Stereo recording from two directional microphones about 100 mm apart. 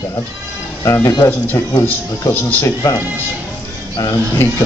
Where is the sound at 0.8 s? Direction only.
30° left (ahead or behind).